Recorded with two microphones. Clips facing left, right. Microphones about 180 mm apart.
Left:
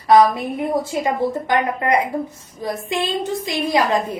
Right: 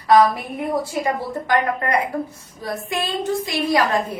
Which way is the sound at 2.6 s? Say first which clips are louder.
Left 3 dB; 20° left (ahead or behind).